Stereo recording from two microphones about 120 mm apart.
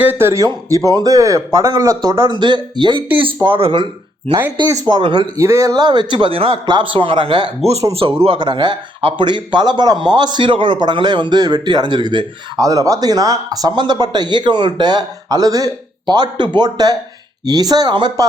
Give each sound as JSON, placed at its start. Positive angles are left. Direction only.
{"t": 0.0, "sound": "speech", "side_deg": -20}
{"t": 4.9, "sound": "speech", "side_deg": -40}
{"t": 5.4, "sound": "speech", "side_deg": -25}
{"t": 7.6, "sound": "speech", "side_deg": -60}
{"t": 8.2, "sound": "speech", "side_deg": -45}